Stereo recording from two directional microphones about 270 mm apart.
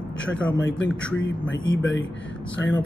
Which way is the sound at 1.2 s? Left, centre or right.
Left.